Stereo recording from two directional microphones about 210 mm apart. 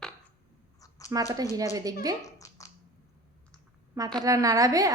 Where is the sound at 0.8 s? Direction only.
15° left (ahead or behind).